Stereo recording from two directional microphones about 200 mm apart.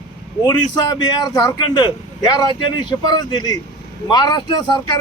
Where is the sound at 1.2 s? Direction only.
20° left (ahead or behind).